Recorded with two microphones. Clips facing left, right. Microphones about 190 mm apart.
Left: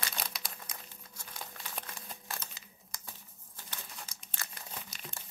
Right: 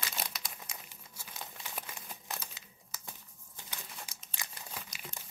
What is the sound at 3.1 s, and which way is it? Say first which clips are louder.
Crumpling: right 1 dB; 15° right (ahead or behind).